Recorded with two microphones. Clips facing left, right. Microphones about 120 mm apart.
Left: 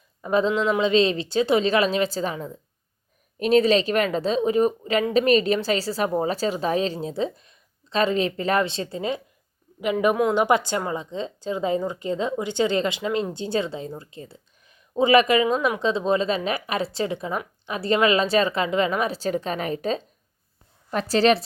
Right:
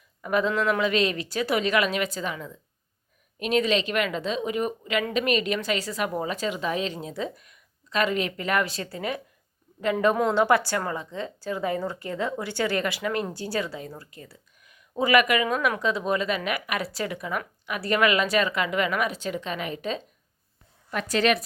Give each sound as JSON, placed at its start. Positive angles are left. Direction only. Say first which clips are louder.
{"t": 0.2, "sound": "a woman's voice", "louder": "left 3 dB", "side_deg": 25}